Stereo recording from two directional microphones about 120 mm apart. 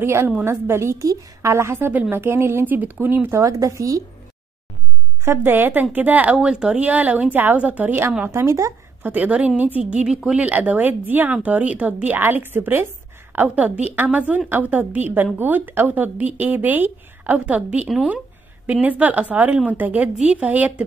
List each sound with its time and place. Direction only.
0.0 s a woman's voice: 20° right (ahead or behind)
5.2 s a woman's voice: 20° right (ahead or behind)
9.0 s a woman's voice: 15° right (ahead or behind)